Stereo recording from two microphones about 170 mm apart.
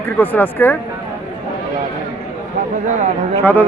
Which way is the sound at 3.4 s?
10° left (ahead or behind).